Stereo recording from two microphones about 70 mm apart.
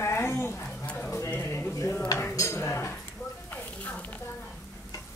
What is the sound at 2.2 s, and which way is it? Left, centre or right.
Cutlery, left.